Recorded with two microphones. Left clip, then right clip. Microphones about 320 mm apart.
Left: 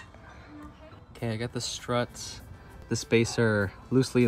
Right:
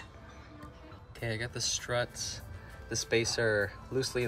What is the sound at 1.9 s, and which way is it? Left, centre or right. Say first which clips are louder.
Speech: left 5 dB; left.